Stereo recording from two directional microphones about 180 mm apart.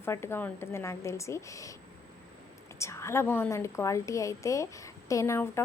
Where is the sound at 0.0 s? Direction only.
15° left (ahead or behind).